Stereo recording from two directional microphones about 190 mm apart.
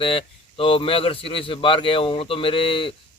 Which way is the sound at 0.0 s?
30° left (ahead or behind).